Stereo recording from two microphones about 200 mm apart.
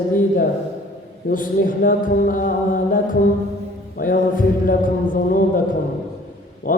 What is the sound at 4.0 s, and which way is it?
Speech, 45° left (ahead or behind).